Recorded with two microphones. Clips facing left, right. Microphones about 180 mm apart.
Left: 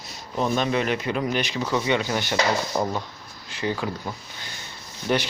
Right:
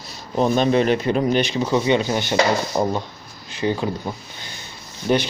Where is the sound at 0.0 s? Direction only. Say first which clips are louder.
Right 6 dB; 30° right (ahead or behind).